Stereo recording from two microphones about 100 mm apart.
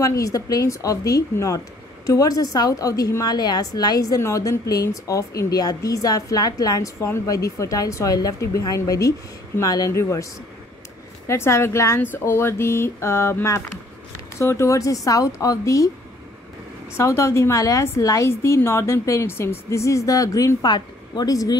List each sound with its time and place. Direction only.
0.0 s a woman's voice: 35° left (ahead or behind)
11.2 s a woman's voice: 25° left (ahead or behind)
16.9 s a woman's voice: 30° left (ahead or behind)